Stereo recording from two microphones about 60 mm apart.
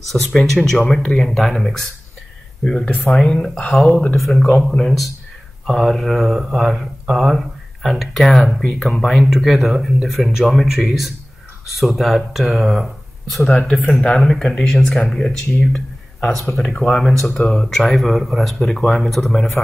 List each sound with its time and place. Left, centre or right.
0.0 s speech: centre
2.6 s speech: centre
3.9 s speech: left
4.2 s speech: centre
16.7 s speech: left
17.2 s speech: centre